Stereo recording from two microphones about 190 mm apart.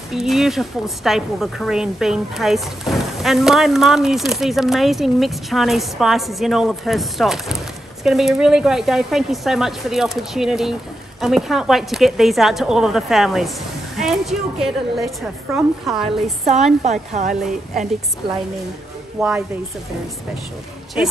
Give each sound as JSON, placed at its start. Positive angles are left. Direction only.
{"t": 0.1, "sound": "a woman's voice", "side_deg": 0}
{"t": 16.8, "sound": "a woman's voice", "side_deg": -40}
{"t": 19.2, "sound": "a woman's voice", "side_deg": 0}